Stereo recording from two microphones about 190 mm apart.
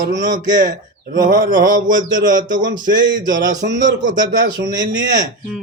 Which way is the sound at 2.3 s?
20° right (ahead or behind).